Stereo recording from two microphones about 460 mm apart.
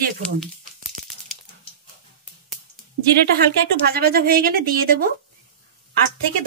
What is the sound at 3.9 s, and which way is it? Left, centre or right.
Speech, centre.